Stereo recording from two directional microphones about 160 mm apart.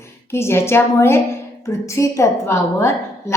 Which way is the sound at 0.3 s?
15° left (ahead or behind).